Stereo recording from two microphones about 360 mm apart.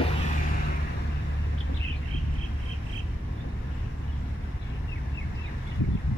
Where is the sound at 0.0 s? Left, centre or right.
Centre.